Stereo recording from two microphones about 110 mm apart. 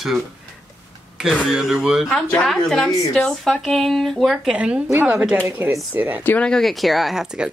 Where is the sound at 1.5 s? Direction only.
5° right (ahead or behind).